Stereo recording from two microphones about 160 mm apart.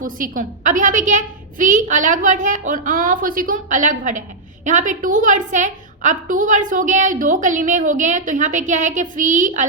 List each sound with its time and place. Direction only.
0.0 s a woman's voice: 55° right (ahead or behind)